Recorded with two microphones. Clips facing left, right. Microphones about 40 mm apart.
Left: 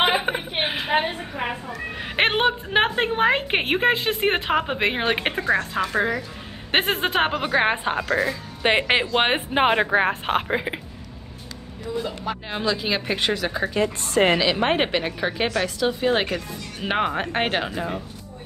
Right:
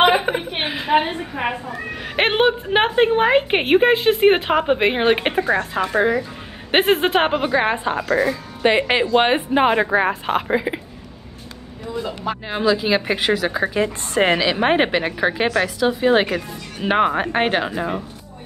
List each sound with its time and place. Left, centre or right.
0.3 s a sound: left
2.0 s a sound: centre
2.2 s a woman's voice: centre
6.7 s speech: centre
7.4 s a woman's voice: centre
8.1 s a woman's voice: centre
8.6 s a woman's voice: centre
12.4 s speech: centre
13.8 s a woman's voice: right
14.4 s a woman's voice: centre